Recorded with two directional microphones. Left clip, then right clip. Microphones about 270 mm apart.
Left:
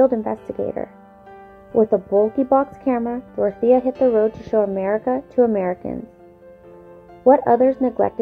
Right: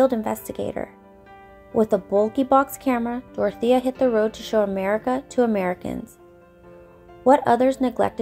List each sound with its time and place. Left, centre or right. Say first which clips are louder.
0.0 s speech: left 3 dB; right
7.2 s speech: left 3 dB; right